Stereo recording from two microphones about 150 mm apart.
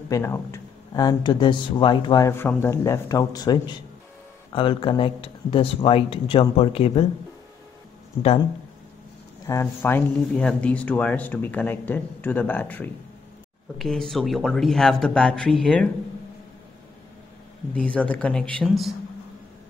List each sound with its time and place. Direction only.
0.1 s speech: 15° left (ahead or behind); by 7.1 s 40° left (ahead or behind)
9.5 s speech: 15° left (ahead or behind)
17.7 s speech: 10° left (ahead or behind)